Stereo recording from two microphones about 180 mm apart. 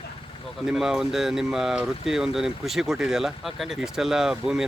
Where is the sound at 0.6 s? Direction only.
5° right (ahead or behind).